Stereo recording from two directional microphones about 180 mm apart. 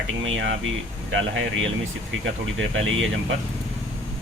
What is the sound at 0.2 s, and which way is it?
Speech, 90° right.